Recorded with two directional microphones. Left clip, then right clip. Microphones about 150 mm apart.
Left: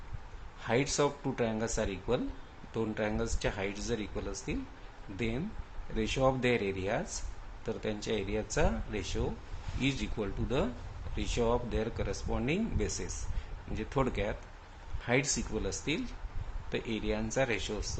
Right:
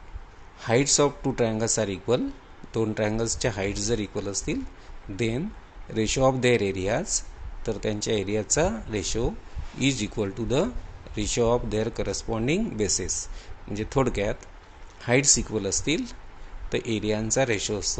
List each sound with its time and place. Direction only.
0.6 s speech: 55° right (ahead or behind)